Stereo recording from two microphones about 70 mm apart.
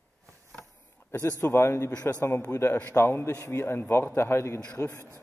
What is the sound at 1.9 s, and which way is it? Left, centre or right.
Speech, left.